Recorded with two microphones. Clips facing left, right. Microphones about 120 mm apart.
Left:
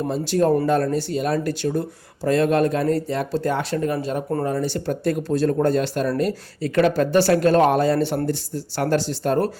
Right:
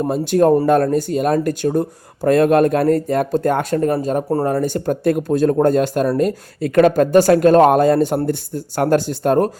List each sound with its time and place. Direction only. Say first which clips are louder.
0.0 s speech: right 5 dB; 50° right (ahead or behind)
4.4 s speech: right 5 dB; 50° right (ahead or behind)